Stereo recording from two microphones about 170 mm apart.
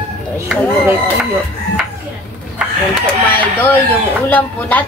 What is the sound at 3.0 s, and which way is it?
A woman's voice, 10° left (ahead or behind).